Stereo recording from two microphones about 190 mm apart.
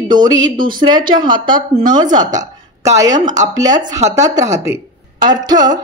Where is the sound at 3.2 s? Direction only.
40° right (ahead or behind).